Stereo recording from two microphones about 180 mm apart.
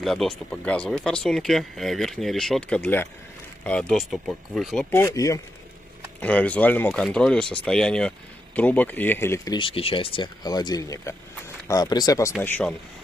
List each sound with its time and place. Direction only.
0.0 s speech: centre (ahead or behind)
4.9 s speech: 15° left (ahead or behind)
12.4 s speech: 10° left (ahead or behind)